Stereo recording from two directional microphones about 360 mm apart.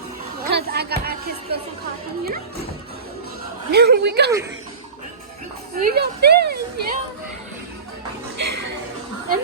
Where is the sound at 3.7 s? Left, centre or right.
Right.